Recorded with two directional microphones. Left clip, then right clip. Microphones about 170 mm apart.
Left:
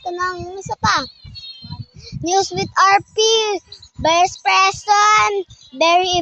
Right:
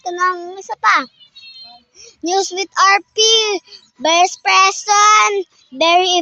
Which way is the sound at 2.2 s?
10° right (ahead or behind).